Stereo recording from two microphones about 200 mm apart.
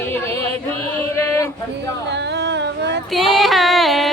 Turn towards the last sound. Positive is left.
turn(degrees=0)  # may be behind; listen again after turning